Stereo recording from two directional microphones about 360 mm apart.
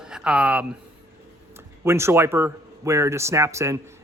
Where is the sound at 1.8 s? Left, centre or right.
Centre.